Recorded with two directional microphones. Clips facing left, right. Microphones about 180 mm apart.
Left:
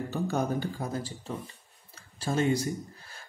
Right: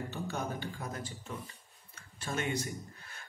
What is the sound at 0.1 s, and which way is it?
Speech, 40° left (ahead or behind).